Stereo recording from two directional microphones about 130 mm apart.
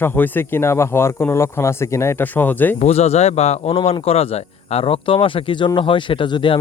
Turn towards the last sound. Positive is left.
turn(degrees=40)  # may be behind; listen again after turning